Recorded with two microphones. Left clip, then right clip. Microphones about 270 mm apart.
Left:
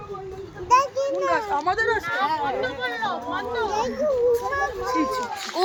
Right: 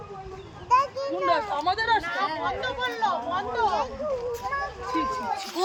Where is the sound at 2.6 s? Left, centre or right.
Right.